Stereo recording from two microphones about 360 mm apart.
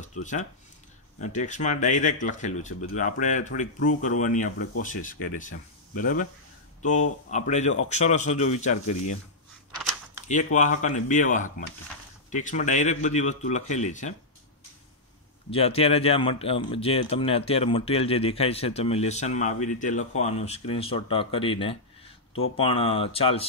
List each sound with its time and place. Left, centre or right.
0.0 s speech: centre
7.2 s speech: centre
10.2 s speech: left
15.5 s speech: centre